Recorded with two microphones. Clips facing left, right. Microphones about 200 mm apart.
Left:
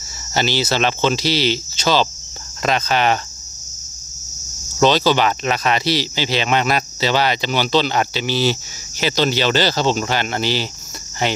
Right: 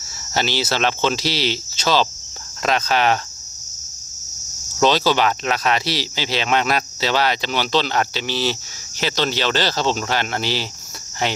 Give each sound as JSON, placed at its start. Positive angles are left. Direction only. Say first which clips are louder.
{"t": 0.0, "sound": "speech", "louder": "left 2 dB", "side_deg": 0}
{"t": 4.7, "sound": "speech", "louder": "left 2 dB", "side_deg": 0}